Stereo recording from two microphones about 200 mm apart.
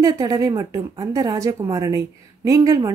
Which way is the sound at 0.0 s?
15° right (ahead or behind).